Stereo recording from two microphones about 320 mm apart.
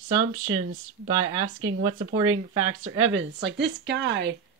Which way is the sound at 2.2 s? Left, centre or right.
Right.